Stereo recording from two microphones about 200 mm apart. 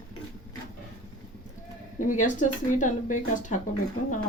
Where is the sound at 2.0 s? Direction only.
40° left (ahead or behind).